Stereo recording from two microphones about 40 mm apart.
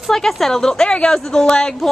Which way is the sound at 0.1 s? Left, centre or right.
Centre.